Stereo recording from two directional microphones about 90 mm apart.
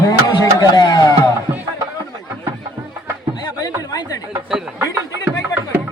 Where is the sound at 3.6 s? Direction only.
45° left (ahead or behind).